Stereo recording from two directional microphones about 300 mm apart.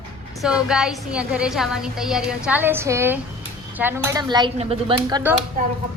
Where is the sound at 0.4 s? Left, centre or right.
Centre.